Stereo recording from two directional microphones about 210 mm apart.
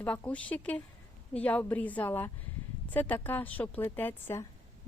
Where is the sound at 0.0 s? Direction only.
5° left (ahead or behind).